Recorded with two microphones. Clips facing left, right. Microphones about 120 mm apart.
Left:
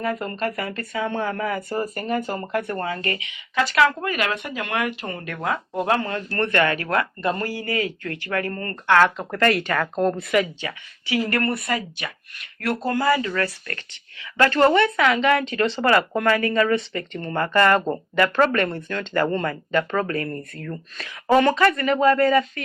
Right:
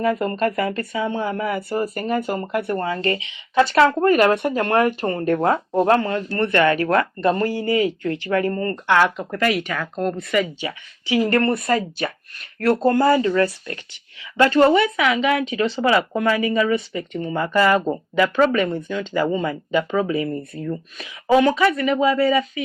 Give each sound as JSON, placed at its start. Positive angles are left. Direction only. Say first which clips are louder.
{"t": 0.1, "sound": "speech", "louder": "right 5 dB", "side_deg": -40}
{"t": 1.2, "sound": "speech", "louder": "right 2 dB", "side_deg": -15}
{"t": 2.8, "sound": "speech", "louder": "right 4 dB", "side_deg": -30}
{"t": 6.5, "sound": "speech", "louder": "right 5 dB", "side_deg": -30}
{"t": 9.1, "sound": "speech", "louder": "even", "side_deg": -5}
{"t": 10.6, "sound": "speech", "louder": "right 3 dB", "side_deg": -20}
{"t": 13.4, "sound": "speech", "louder": "right 6 dB", "side_deg": -15}